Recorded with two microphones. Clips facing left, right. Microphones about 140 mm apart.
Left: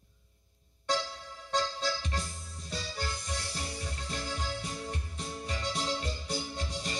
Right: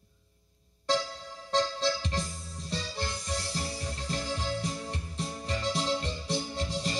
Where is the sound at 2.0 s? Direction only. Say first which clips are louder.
Right 3 dB; 35° right (ahead or behind).